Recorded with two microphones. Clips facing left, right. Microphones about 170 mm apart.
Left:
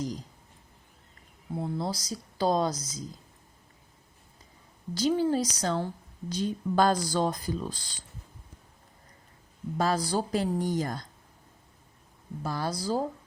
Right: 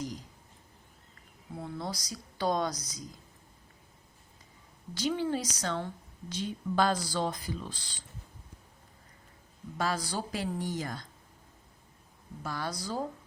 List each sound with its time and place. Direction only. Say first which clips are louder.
1.5 s speech: left 6 dB; 30° left (ahead or behind)
4.9 s a woman's voice: left 5 dB; 35° left (ahead or behind)
9.7 s a woman's voice: left 5 dB; 35° left (ahead or behind)
12.4 s a woman's voice: left 4 dB; 35° left (ahead or behind)